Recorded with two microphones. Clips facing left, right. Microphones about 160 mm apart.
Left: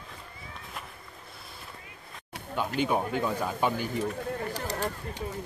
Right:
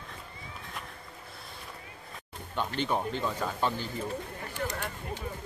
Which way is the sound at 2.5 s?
10° left (ahead or behind).